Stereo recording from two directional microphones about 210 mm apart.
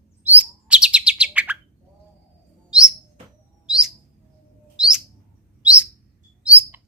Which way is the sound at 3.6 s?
5° right (ahead or behind).